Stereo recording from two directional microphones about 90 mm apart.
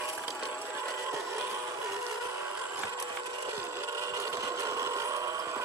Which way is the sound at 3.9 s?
35° right (ahead or behind).